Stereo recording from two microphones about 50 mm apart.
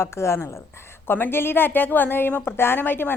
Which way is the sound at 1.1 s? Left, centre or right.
Left.